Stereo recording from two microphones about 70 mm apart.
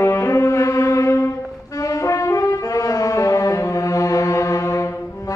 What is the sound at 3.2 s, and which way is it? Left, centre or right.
Music, left.